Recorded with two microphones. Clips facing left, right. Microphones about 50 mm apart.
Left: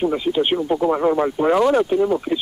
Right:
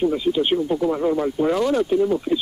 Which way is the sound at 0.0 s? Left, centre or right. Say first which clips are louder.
Left 1 dB; left.